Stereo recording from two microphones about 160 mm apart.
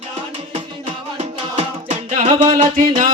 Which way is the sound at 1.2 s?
45° right (ahead or behind).